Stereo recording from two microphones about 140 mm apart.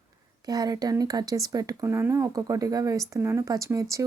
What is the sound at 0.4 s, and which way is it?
Speech, 30° right (ahead or behind).